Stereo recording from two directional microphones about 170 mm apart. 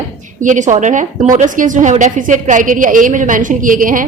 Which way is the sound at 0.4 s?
45° right (ahead or behind).